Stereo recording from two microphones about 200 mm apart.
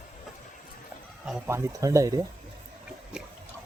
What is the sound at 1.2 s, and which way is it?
Speech, 10° right (ahead or behind).